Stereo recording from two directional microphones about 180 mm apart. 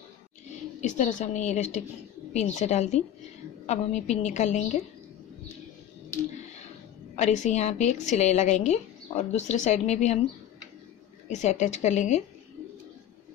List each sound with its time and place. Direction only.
0.5 s a woman's voice: 40° left (ahead or behind)
7.2 s a woman's voice: 40° left (ahead or behind)
11.2 s a woman's voice: 40° left (ahead or behind)